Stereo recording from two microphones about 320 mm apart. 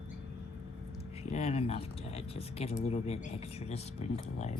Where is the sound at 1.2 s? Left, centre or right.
Centre.